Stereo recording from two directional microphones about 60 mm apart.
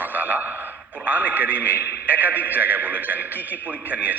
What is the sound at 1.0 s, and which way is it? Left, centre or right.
A man's voice, right.